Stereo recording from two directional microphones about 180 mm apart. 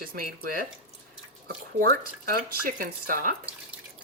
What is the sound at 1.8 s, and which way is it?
Speech, 60° right (ahead or behind).